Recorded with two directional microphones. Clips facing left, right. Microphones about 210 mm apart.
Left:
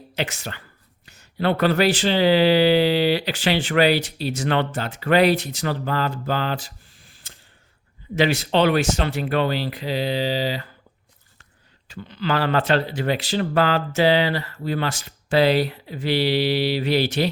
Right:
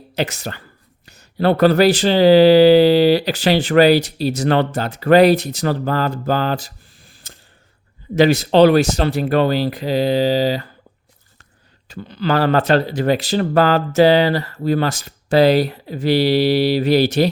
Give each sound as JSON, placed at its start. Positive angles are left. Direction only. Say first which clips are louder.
{"t": 0.1, "sound": "speech", "louder": "right 5 dB", "side_deg": -40}
{"t": 11.9, "sound": "speech", "louder": "right 5 dB", "side_deg": -40}